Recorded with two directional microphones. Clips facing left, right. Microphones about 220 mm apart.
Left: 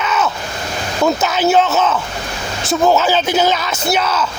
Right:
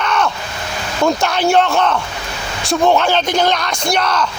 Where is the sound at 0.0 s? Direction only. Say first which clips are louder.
Even; 5° left (ahead or behind).